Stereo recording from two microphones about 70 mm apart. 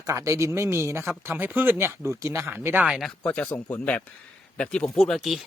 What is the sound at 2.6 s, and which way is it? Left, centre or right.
Speech, right.